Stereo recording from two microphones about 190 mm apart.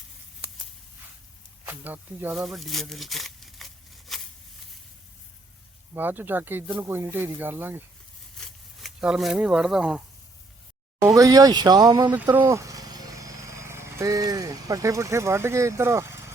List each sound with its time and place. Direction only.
1.6 s speech: 10° right (ahead or behind)
5.9 s speech: 10° right (ahead or behind)
8.4 s a sound: centre (ahead or behind)
11.0 s speech: 15° right (ahead or behind)
12.1 s speech: 10° right (ahead or behind)